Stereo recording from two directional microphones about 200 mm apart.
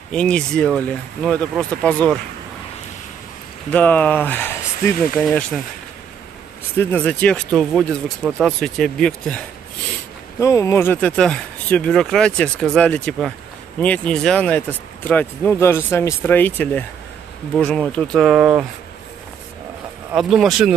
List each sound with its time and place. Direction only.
0.1 s speech: 5° left (ahead or behind)
3.7 s speech: 10° left (ahead or behind)
6.8 s speech: 10° left (ahead or behind)
10.4 s speech: 15° left (ahead or behind); by 18.7 s 5° right (ahead or behind)
20.1 s speech: 5° right (ahead or behind)